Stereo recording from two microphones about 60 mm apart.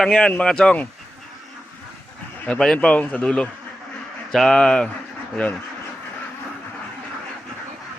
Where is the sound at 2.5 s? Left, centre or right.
Centre.